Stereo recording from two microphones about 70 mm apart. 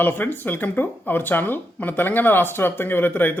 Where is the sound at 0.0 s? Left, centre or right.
Left.